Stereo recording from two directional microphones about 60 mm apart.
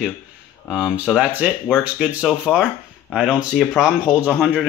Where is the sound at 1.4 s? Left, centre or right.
Right.